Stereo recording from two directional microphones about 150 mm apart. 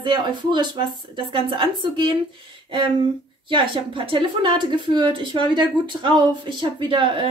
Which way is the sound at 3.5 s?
35° right (ahead or behind).